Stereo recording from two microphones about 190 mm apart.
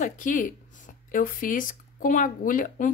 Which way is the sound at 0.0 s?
45° left (ahead or behind).